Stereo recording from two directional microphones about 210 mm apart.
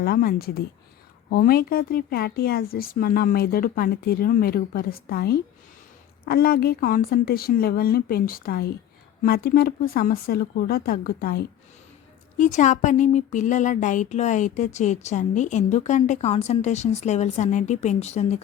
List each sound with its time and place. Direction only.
0.0 s speech: 45° left (ahead or behind); by 18.3 s 30° left (ahead or behind)